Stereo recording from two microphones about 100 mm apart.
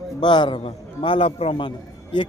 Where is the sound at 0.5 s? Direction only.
70° left (ahead or behind); by 2.2 s 55° left (ahead or behind).